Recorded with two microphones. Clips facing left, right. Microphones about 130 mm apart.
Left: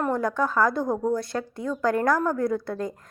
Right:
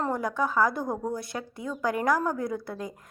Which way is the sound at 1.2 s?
20° right (ahead or behind).